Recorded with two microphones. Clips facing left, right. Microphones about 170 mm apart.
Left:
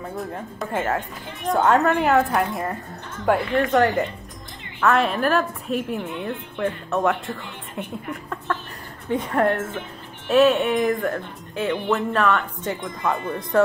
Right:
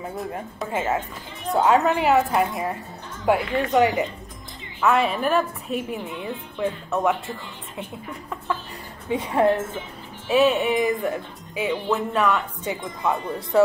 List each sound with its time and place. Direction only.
0.6 s speech: 5° right (ahead or behind)
9.1 s a woman's voice: 15° right (ahead or behind)
10.2 s speech: 5° right (ahead or behind)